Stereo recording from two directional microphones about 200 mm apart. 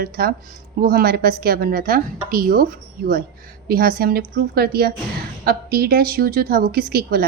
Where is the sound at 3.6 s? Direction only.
50° right (ahead or behind).